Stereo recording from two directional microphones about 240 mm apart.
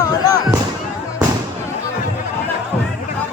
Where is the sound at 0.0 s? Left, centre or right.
Centre.